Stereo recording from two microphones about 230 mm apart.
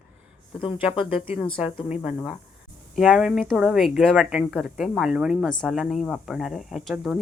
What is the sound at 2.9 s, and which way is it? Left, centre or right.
Speech, centre.